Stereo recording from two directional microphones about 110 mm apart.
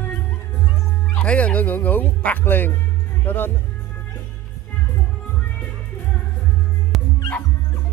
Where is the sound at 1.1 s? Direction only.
15° left (ahead or behind).